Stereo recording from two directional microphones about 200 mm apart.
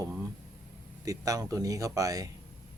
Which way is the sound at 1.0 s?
15° right (ahead or behind).